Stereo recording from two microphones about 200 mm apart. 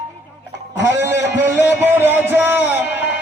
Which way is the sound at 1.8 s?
10° right (ahead or behind).